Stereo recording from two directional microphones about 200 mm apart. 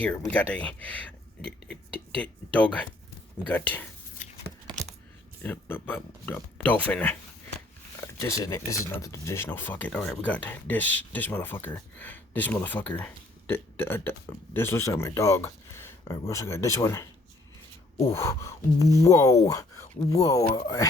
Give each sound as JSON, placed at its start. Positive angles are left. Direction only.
{"t": 0.0, "sound": "speech", "side_deg": 5}
{"t": 1.5, "sound": "cutlery", "side_deg": 5}
{"t": 2.2, "sound": "speech", "side_deg": 5}
{"t": 5.4, "sound": "speech", "side_deg": 10}